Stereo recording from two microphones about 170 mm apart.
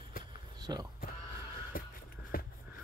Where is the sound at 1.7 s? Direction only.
60° left (ahead or behind).